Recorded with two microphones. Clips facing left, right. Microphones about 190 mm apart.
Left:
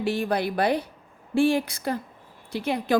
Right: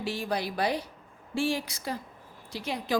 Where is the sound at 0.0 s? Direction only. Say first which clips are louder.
Left 6 dB; 55° left (ahead or behind).